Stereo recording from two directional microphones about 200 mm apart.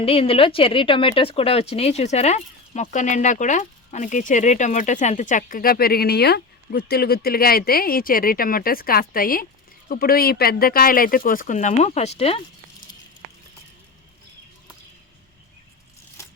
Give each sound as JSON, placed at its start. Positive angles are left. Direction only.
{"t": 0.0, "sound": "speech", "side_deg": 30}